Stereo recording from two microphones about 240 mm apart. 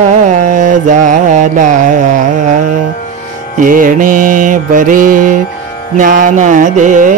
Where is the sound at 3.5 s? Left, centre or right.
Right.